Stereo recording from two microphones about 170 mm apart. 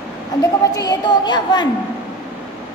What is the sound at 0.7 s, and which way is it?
Speech, 25° left (ahead or behind).